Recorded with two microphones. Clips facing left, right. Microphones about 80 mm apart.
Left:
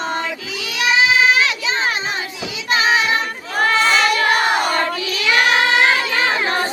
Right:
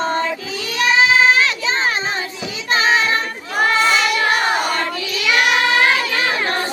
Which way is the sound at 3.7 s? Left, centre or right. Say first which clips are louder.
Left 2 dB; left.